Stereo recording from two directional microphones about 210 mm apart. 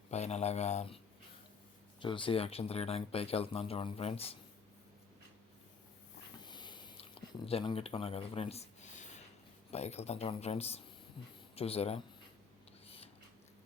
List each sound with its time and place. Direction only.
0.1 s speech: 30° left (ahead or behind)
2.0 s speech: 25° left (ahead or behind)
6.4 s a sound: 20° left (ahead or behind)
9.7 s speech: 30° left (ahead or behind)